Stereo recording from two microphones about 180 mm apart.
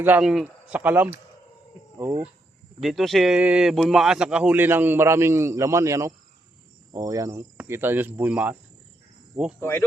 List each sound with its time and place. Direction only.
0.0 s a man's voice: 10° right (ahead or behind)
2.8 s a man's voice: centre (ahead or behind)
9.6 s speech: 15° left (ahead or behind)